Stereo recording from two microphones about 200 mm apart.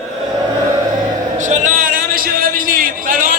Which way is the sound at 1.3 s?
35° right (ahead or behind).